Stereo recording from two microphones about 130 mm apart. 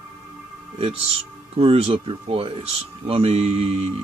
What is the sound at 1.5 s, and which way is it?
Speech, 50° right (ahead or behind).